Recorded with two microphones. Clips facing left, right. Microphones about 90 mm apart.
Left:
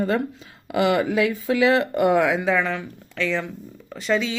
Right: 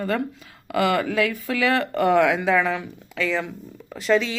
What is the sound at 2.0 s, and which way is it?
Speech, 5° left (ahead or behind).